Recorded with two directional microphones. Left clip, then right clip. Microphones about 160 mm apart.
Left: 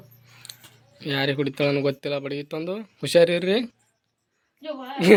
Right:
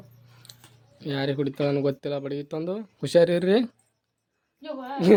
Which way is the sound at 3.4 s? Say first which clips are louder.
Right 1 dB; 40° right (ahead or behind).